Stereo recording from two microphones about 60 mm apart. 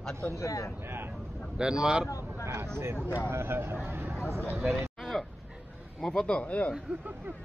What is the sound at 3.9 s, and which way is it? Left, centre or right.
Chatter, right.